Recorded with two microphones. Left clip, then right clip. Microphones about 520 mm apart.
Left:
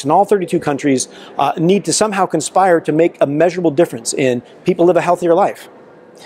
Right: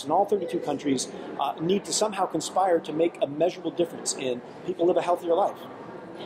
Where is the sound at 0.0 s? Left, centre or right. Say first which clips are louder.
Left 11 dB; left.